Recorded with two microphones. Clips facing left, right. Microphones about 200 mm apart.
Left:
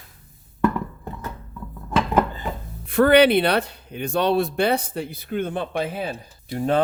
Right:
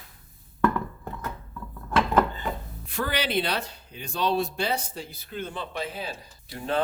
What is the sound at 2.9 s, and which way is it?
Speech, 60° left (ahead or behind).